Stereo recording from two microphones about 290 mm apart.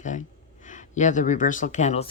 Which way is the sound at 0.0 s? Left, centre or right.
Left.